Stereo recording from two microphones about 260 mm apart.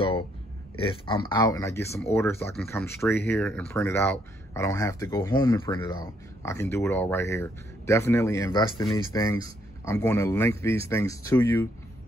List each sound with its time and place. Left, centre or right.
0.7 s speech: centre